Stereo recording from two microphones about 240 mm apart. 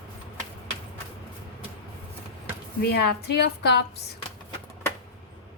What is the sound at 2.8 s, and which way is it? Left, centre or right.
Speech, left.